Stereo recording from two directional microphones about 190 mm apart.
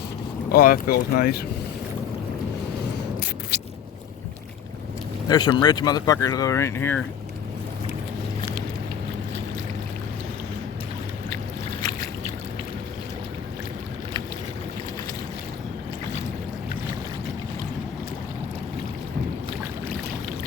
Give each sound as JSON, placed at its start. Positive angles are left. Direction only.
{"t": 0.5, "sound": "speech", "side_deg": 50}
{"t": 5.3, "sound": "speech", "side_deg": 20}